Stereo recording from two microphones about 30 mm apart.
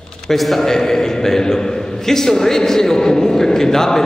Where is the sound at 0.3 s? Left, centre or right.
Centre.